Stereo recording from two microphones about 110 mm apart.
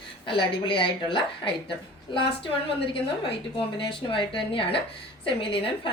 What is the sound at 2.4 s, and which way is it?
A woman's voice, 55° left (ahead or behind).